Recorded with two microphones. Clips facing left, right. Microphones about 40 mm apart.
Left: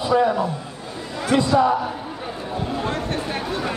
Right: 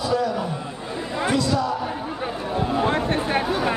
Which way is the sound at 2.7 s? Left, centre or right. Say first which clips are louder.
Right 5 dB; right.